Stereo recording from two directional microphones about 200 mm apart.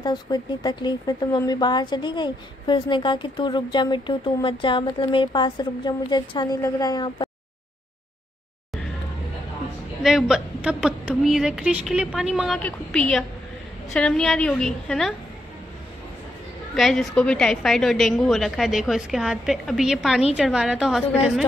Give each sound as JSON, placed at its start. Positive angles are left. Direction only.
{"t": 0.0, "sound": "speech", "side_deg": 20}
{"t": 10.0, "sound": "a woman's voice", "side_deg": 0}
{"t": 16.7, "sound": "a woman's voice", "side_deg": 0}